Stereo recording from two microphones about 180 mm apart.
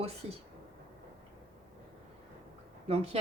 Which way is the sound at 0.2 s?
35° right (ahead or behind).